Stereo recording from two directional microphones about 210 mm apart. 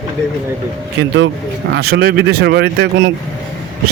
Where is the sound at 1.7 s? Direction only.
50° right (ahead or behind).